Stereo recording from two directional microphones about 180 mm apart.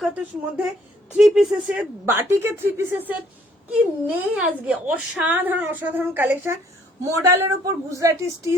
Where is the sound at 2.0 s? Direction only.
10° right (ahead or behind).